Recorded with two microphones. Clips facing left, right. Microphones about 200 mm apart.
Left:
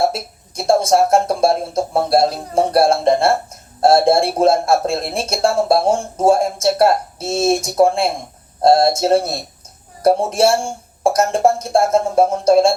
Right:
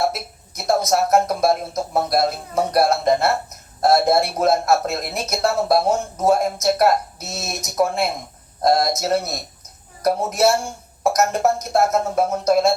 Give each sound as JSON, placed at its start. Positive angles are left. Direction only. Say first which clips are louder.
{"t": 0.0, "sound": "a man's voice", "louder": "left 4 dB", "side_deg": 30}